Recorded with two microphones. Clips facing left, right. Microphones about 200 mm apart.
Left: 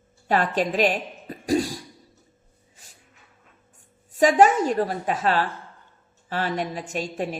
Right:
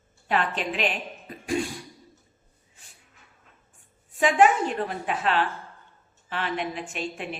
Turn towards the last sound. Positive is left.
turn(degrees=40)  # may be behind; listen again after turning